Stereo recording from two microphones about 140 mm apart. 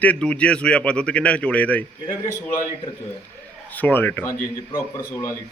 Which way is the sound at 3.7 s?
15° left (ahead or behind).